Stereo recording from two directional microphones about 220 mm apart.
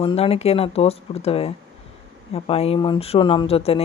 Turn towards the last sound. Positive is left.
turn(degrees=25)  # may be behind; listen again after turning